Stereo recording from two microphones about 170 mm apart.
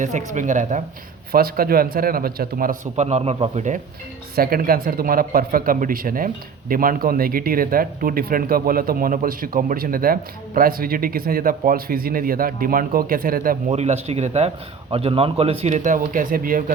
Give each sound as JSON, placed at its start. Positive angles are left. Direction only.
{"t": 0.0, "sound": "speech", "side_deg": -45}
{"t": 1.3, "sound": "a man's voice", "side_deg": -60}
{"t": 2.9, "sound": "speech", "side_deg": -40}
{"t": 4.4, "sound": "a man's voice", "side_deg": -60}
{"t": 13.7, "sound": "speech", "side_deg": -40}